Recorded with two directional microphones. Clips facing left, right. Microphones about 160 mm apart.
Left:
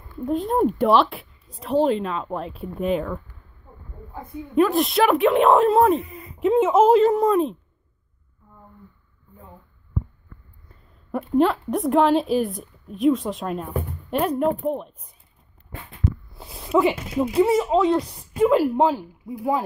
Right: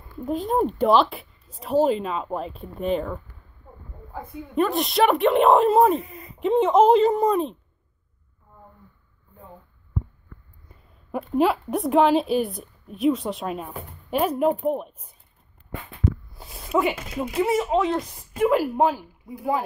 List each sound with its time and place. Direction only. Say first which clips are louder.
0.2 s speech: left 2 dB; centre (ahead or behind)
11.1 s speech: left 2 dB; 5° right (ahead or behind)
16.0 s a sound: right 1 dB; centre (ahead or behind)
16.8 s speech: left 4 dB; 30° left (ahead or behind)